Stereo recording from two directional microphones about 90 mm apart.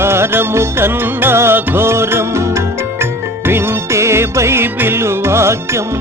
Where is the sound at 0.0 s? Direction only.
30° right (ahead or behind).